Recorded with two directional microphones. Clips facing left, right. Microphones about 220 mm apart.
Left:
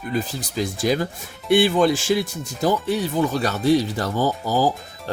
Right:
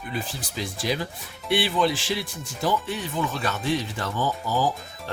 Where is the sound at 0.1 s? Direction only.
40° left (ahead or behind).